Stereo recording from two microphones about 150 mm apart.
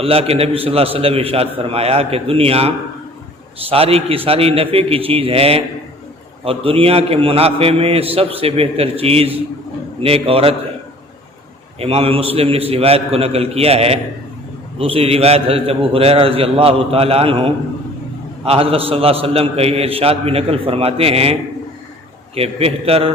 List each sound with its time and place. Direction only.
0.0 s a man's voice: 40° right (ahead or behind)
11.8 s a man's voice: 40° right (ahead or behind)
22.4 s a man's voice: 40° right (ahead or behind)